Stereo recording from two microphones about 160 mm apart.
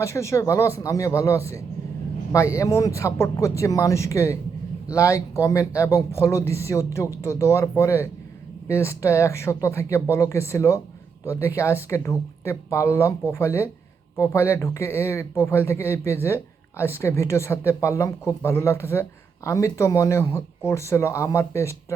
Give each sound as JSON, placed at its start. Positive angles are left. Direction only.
{"t": 0.0, "sound": "speech", "side_deg": 20}